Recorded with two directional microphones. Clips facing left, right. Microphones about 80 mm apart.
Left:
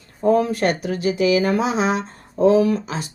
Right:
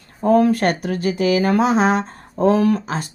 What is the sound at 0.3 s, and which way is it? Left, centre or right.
Speech, right.